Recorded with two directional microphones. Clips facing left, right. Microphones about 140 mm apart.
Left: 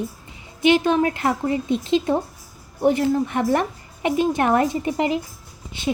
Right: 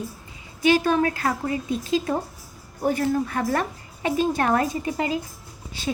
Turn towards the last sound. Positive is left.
turn(degrees=20)  # may be behind; listen again after turning